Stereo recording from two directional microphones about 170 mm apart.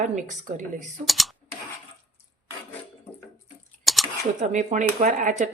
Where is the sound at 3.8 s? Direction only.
Centre (ahead or behind).